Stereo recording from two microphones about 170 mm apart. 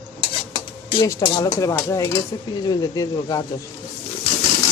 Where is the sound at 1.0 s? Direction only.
20° left (ahead or behind).